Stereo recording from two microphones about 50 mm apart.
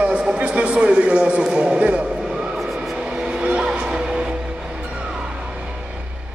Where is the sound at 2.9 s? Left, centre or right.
Centre.